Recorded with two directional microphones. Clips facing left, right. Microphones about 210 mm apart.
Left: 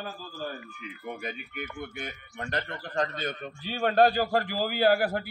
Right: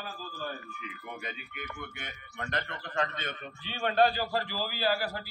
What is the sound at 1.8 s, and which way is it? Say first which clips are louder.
A man's voice: left 6 dB; 35° left (ahead or behind).